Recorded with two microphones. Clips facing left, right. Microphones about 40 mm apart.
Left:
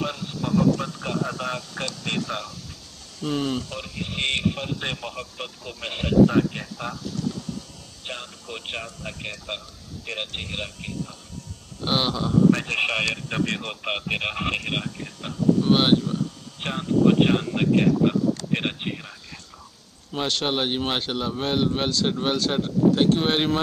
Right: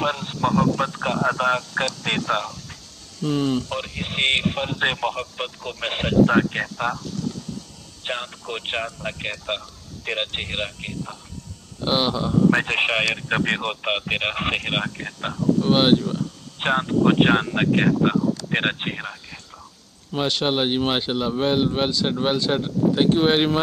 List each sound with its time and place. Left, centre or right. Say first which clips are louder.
0.0 s speech: right 6 dB; right
3.2 s speech: right 4 dB; centre
3.7 s speech: right 4 dB; right
8.0 s speech: right 7 dB; right
11.8 s speech: right 2 dB; centre
12.4 s speech: right 2 dB; right
15.6 s speech: right 4 dB; centre
16.5 s speech: right 3 dB; right
20.1 s speech: right 3 dB; centre